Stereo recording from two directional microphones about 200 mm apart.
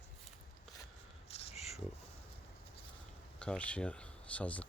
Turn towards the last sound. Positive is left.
turn(degrees=5)  # may be behind; listen again after turning